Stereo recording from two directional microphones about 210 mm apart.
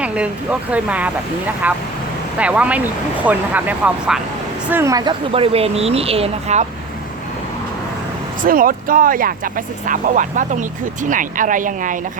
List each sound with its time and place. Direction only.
0.0 s a sound: 5° right (ahead or behind)
0.7 s speech: 5° right (ahead or behind); by 6.7 s 30° right (ahead or behind)
8.4 s speech: 40° right (ahead or behind)